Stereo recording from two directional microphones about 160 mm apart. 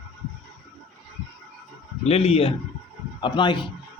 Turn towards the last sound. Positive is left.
turn(degrees=30)  # may be behind; listen again after turning